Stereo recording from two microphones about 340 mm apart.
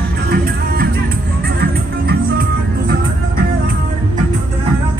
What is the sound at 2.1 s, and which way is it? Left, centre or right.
Music, right.